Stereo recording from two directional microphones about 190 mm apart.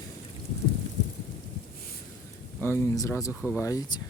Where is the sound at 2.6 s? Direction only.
10° left (ahead or behind).